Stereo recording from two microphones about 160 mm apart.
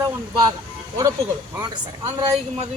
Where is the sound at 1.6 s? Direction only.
25° right (ahead or behind).